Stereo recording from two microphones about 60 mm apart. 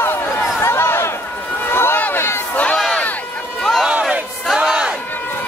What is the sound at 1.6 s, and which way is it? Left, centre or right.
Run, left.